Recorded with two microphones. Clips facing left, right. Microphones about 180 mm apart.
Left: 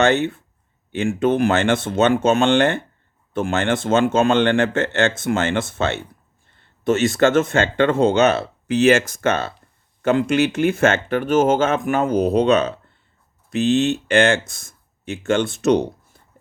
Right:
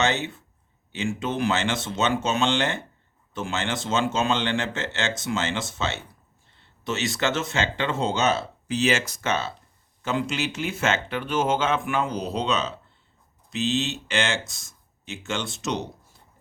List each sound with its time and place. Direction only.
0.0 s speech: 55° left (ahead or behind)